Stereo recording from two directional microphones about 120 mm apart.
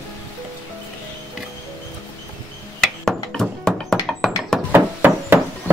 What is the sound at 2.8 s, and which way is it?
Music, 5° left (ahead or behind).